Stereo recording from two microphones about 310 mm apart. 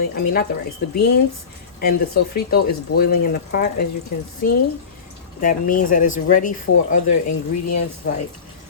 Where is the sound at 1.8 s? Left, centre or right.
Left.